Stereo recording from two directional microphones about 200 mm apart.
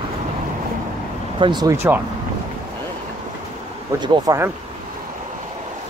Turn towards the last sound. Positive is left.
turn(degrees=-15)  # may be behind; listen again after turning